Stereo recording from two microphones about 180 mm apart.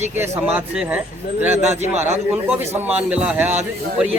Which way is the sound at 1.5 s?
40° right (ahead or behind).